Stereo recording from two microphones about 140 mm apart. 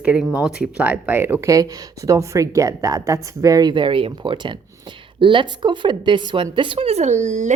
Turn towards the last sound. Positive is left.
turn(degrees=-60)  # may be behind; listen again after turning